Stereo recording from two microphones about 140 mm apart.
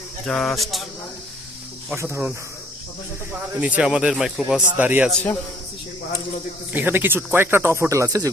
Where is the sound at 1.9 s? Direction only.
20° right (ahead or behind).